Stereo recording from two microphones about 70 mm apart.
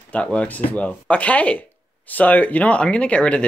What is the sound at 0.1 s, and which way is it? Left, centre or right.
Speech, centre.